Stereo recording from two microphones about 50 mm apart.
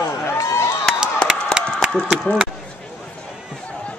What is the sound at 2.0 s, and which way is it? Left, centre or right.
Speech, centre.